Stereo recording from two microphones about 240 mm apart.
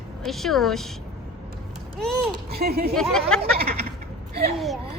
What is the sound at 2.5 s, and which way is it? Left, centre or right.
Speech, right.